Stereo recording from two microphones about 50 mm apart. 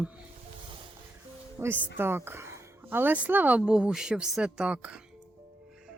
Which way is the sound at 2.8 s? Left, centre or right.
Right.